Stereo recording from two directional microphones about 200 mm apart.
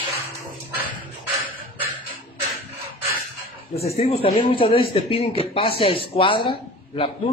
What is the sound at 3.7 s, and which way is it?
Speech, 30° left (ahead or behind).